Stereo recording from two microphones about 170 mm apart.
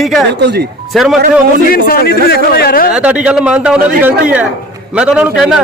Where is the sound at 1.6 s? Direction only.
60° left (ahead or behind).